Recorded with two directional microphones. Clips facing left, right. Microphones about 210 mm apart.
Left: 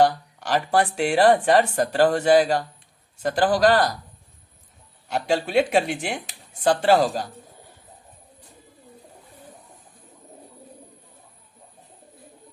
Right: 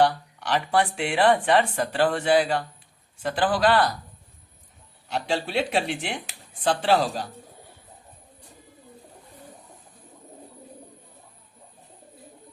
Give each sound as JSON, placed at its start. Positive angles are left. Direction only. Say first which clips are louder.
{"t": 0.0, "sound": "speech", "louder": "left 2 dB", "side_deg": 45}
{"t": 5.0, "sound": "speech", "louder": "left 3 dB", "side_deg": 45}